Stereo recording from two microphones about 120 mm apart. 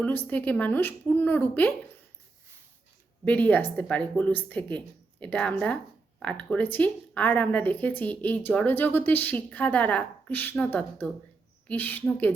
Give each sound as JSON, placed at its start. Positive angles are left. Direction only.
{"t": 0.0, "sound": "speech", "side_deg": 15}
{"t": 3.2, "sound": "speech", "side_deg": 10}